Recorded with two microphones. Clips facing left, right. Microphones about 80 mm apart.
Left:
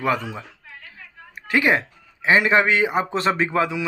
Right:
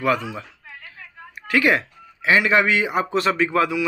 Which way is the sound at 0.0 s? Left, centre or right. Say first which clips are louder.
Right 1 dB; left.